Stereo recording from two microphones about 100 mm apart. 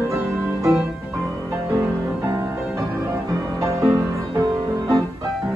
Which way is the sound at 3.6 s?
30° right (ahead or behind).